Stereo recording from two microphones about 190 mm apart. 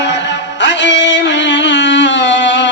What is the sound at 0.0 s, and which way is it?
Music, 70° left (ahead or behind).